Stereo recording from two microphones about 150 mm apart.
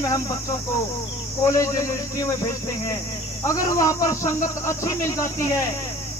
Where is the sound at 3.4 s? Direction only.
20° left (ahead or behind).